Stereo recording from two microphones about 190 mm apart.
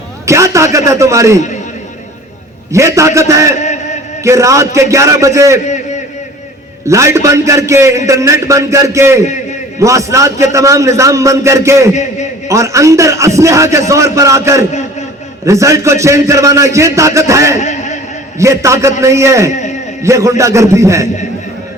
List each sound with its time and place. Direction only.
0.3 s a man's voice: 15° right (ahead or behind)
2.7 s a man's voice: 15° right (ahead or behind)
3.6 s a sound: 40° left (ahead or behind)
4.2 s a man's voice: 15° right (ahead or behind)
6.8 s a man's voice: 15° right (ahead or behind)
17.6 s a sound: 40° left (ahead or behind)
18.3 s a man's voice: 15° right (ahead or behind)